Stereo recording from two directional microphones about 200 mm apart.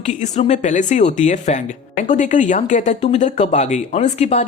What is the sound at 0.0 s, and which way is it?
Speech, 35° left (ahead or behind).